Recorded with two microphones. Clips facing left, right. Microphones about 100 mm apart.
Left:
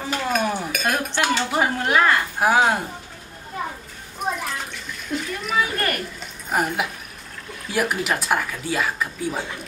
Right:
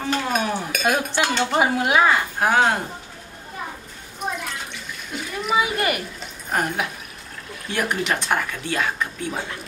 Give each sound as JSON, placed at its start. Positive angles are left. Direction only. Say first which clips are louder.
{"t": 0.1, "sound": "dishes", "louder": "left 1 dB", "side_deg": 0}
{"t": 1.6, "sound": "speech", "louder": "right 2 dB", "side_deg": -10}
{"t": 2.3, "sound": "speech", "louder": "left 1 dB", "side_deg": 5}
{"t": 5.1, "sound": "speech", "louder": "right 1 dB", "side_deg": -5}
{"t": 6.5, "sound": "speech", "louder": "left 1 dB", "side_deg": 5}